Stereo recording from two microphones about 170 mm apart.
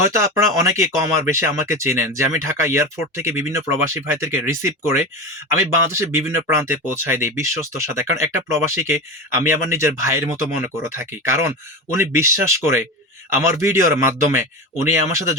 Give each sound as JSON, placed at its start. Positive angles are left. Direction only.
{"t": 0.0, "sound": "speech", "side_deg": -15}